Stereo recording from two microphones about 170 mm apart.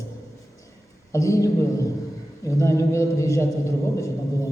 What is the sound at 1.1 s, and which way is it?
A man's voice, 20° left (ahead or behind).